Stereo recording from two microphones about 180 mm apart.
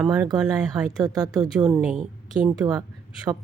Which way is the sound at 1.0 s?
20° right (ahead or behind).